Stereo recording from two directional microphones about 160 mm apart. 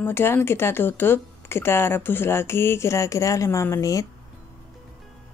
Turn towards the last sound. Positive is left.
turn(degrees=20)  # may be behind; listen again after turning